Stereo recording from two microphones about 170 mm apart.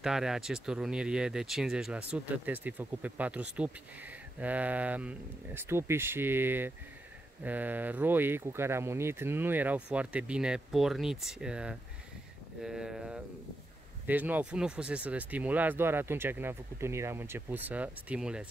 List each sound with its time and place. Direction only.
0.0 s speech: 5° right (ahead or behind)